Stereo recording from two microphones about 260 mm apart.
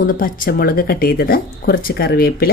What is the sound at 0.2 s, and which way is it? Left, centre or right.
Speech, left.